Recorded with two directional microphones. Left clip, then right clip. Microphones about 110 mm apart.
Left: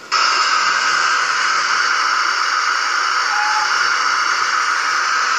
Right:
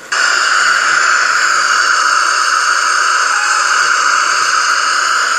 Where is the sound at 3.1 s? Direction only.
60° right (ahead or behind).